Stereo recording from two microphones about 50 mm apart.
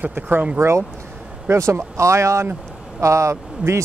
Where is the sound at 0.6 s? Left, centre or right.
Right.